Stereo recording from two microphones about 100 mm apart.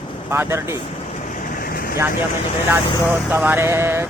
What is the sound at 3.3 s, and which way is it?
Speech, 20° right (ahead or behind).